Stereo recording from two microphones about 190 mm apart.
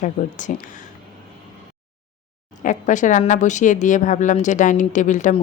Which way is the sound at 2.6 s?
40° left (ahead or behind).